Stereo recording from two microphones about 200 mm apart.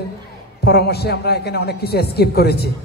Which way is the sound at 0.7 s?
55° left (ahead or behind).